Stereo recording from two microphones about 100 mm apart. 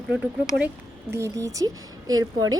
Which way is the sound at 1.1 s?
30° right (ahead or behind).